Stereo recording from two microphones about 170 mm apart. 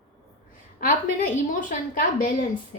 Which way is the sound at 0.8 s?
50° left (ahead or behind).